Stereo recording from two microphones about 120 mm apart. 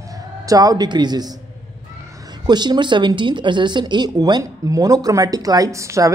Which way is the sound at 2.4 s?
35° right (ahead or behind).